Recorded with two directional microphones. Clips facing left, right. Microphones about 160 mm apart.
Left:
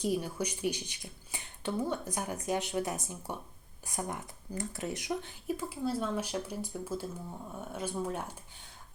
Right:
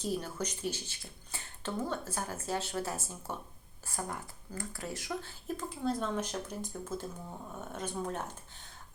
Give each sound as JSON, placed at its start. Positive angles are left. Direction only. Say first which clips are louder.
{"t": 0.0, "sound": "speech", "louder": "left 3 dB", "side_deg": 10}